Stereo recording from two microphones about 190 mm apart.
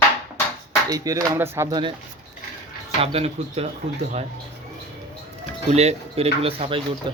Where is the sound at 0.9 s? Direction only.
20° right (ahead or behind).